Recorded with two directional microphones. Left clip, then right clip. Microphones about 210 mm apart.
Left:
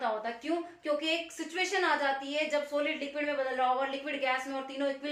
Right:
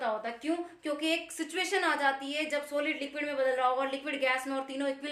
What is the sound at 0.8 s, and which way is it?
A woman's voice, 55° right (ahead or behind).